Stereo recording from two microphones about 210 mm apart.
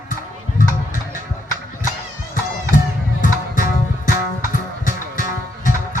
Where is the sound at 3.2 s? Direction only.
40° left (ahead or behind).